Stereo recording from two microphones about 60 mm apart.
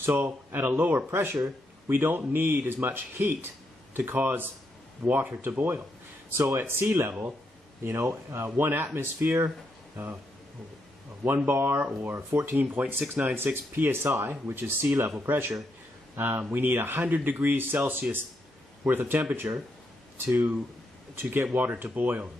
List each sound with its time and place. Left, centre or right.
0.1 s speech: right
6.3 s speech: right
11.4 s speech: right
12.5 s speech: right